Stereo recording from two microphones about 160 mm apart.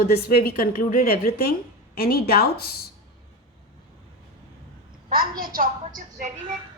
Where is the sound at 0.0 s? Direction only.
70° left (ahead or behind).